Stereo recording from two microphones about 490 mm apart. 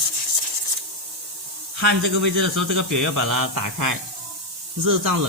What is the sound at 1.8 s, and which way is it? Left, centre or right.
Speech, right.